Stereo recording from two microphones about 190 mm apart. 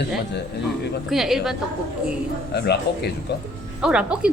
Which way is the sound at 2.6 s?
60° left (ahead or behind).